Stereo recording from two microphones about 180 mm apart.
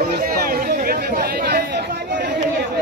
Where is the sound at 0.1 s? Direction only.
60° right (ahead or behind).